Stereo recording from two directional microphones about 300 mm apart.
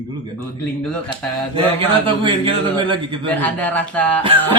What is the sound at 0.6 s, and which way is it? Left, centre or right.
Speech, centre.